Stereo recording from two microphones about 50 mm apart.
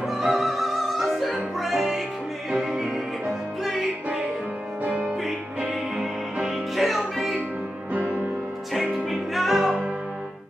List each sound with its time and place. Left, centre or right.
0.2 s opera: centre
1.6 s music: centre
4.8 s music: right
5.9 s music: centre
7.9 s music: right
9.1 s music: centre